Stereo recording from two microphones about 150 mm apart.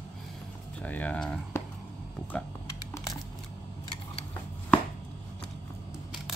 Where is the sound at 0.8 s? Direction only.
10° left (ahead or behind).